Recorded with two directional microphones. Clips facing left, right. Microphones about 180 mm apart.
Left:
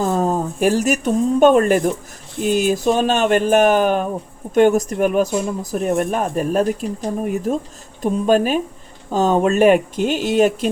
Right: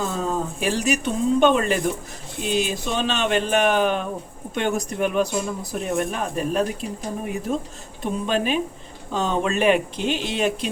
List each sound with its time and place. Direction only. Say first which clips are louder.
0.0 s speech: left 6 dB; 45° left (ahead or behind)